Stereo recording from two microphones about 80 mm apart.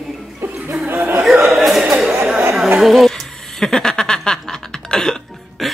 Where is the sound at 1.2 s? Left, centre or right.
Centre.